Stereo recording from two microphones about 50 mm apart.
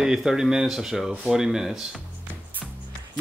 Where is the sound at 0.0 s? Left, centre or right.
Centre.